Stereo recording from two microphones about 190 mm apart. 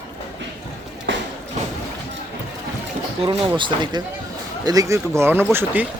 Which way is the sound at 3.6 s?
25° right (ahead or behind).